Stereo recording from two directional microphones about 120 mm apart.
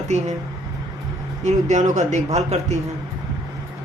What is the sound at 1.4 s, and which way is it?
Speech, 75° right (ahead or behind).